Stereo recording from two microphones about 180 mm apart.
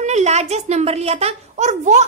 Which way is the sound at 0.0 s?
40° right (ahead or behind).